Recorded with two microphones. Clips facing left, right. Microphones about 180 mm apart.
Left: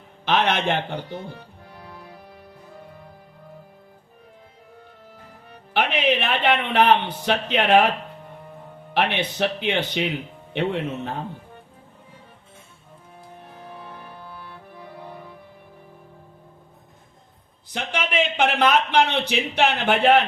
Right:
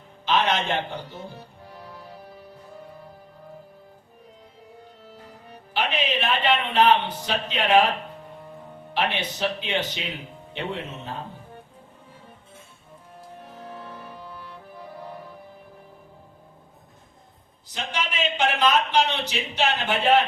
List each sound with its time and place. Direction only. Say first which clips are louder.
0.3 s a man's voice: left 2 dB; 60° left (ahead or behind)
5.7 s speech: left 5 dB; 60° left (ahead or behind)
8.9 s speech: left 3 dB; 65° left (ahead or behind)
17.7 s a sound: left 3 dB; 60° left (ahead or behind)